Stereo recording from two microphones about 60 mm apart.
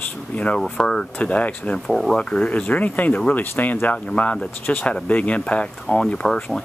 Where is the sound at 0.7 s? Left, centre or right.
Centre.